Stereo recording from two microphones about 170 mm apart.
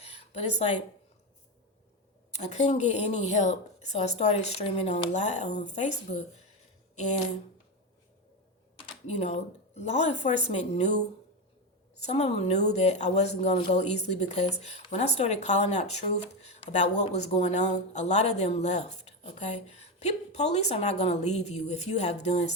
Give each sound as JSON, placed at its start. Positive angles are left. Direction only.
{"t": 2.3, "sound": "speech", "side_deg": 40}
{"t": 9.0, "sound": "speech", "side_deg": 40}
{"t": 12.0, "sound": "speech", "side_deg": 40}